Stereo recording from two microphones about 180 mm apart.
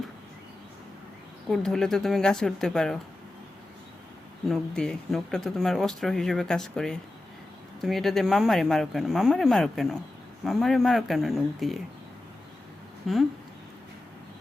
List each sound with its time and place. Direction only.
1.5 s speech: centre (ahead or behind)
4.4 s speech: centre (ahead or behind)
13.1 s speech: centre (ahead or behind)